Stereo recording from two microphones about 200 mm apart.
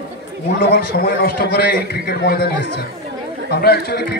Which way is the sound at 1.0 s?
50° left (ahead or behind).